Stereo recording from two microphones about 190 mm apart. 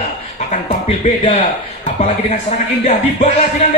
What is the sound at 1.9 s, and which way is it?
Speech, 35° left (ahead or behind).